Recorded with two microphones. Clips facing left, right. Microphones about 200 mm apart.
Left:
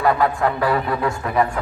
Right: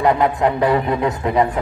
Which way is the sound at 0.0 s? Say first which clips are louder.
Right 2 dB; 20° right (ahead or behind).